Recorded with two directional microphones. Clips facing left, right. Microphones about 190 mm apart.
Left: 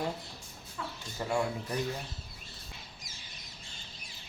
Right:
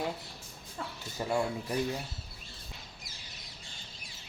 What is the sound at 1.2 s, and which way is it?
Speech, 15° right (ahead or behind).